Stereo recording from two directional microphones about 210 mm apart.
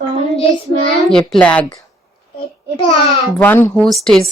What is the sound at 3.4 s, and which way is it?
Speech, 10° left (ahead or behind).